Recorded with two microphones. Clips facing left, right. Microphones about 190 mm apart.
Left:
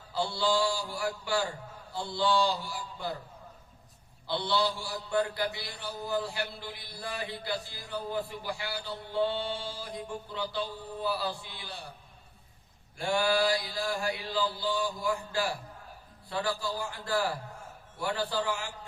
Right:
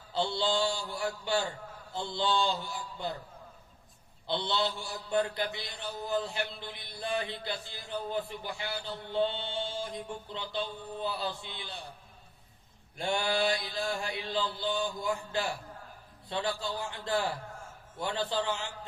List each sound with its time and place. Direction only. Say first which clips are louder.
0.1 s mantra: left 1 dB; 20° right (ahead or behind)
4.3 s mantra: left 2 dB; 20° right (ahead or behind)
13.0 s mantra: left 3 dB; 20° right (ahead or behind)